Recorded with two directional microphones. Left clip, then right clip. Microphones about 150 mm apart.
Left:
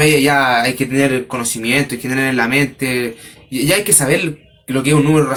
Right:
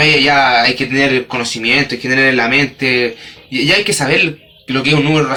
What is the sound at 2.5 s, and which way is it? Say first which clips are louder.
Speech: right 4 dB; 35° left (ahead or behind).